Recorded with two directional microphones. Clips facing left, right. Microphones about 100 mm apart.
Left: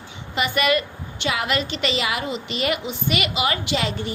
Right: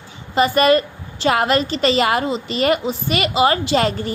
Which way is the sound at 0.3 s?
35° right (ahead or behind).